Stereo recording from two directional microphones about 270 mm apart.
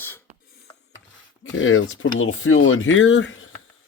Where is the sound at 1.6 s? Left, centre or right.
Left.